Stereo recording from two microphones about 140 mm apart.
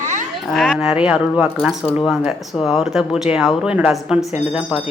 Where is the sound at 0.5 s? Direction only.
5° right (ahead or behind).